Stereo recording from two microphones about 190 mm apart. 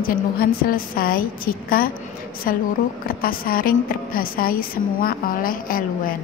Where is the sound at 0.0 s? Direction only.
50° left (ahead or behind).